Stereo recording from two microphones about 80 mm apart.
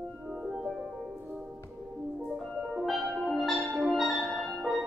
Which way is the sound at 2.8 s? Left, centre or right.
Centre.